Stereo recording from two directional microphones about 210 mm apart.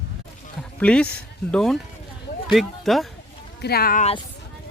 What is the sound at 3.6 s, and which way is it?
Speech, 50° left (ahead or behind).